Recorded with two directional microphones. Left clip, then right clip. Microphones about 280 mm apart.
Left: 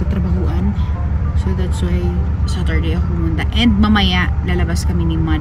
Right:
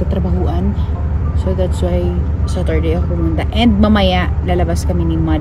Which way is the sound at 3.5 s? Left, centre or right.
Centre.